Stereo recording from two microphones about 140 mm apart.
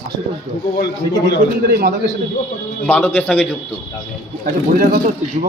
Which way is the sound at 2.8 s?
10° left (ahead or behind).